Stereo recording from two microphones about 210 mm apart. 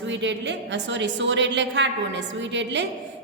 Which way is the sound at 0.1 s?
60° right (ahead or behind).